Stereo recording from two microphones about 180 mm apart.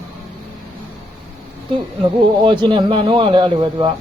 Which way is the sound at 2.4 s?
25° right (ahead or behind).